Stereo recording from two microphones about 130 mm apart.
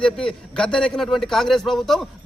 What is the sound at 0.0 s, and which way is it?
A man's voice, 5° left (ahead or behind).